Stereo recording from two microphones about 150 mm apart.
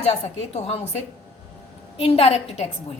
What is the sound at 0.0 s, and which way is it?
Speech, 45° left (ahead or behind).